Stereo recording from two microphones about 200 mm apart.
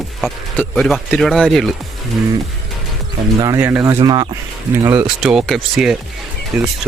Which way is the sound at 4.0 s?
20° right (ahead or behind).